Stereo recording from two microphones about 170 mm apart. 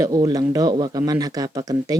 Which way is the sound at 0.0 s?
20° right (ahead or behind).